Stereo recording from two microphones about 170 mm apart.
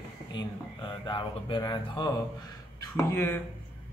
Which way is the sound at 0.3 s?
25° left (ahead or behind).